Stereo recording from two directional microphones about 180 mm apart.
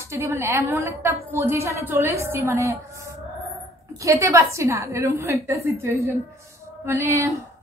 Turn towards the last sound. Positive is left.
turn(degrees=-15)  # may be behind; listen again after turning